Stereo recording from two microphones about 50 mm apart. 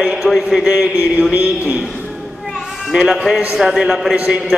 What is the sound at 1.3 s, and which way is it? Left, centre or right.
Speech, right.